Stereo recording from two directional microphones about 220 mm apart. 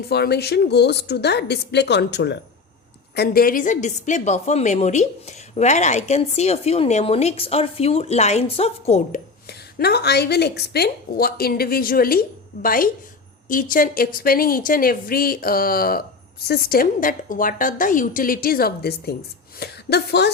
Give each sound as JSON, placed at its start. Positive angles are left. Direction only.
{"t": 0.1, "sound": "a woman's voice", "side_deg": 45}
{"t": 9.5, "sound": "a woman's voice", "side_deg": 45}